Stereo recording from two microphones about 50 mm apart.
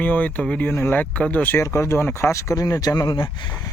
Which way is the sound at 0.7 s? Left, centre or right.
Left.